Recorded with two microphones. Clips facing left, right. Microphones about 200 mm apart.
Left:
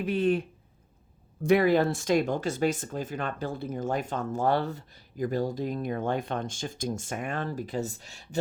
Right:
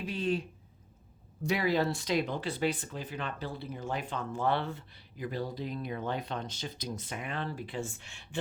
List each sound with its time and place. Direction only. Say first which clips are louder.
0.0 s speech: left 7 dB; 55° left (ahead or behind); by 8.4 s 40° left (ahead or behind)